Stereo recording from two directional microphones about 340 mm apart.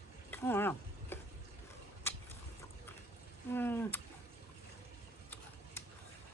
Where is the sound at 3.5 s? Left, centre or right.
Centre.